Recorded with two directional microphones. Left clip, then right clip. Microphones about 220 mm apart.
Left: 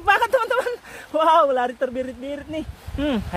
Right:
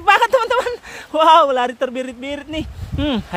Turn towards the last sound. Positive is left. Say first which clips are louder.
# right 3 dB
turn(degrees=-15)  # may be behind; listen again after turning